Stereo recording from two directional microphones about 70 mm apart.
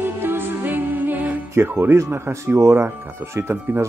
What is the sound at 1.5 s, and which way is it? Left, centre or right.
Speech, right.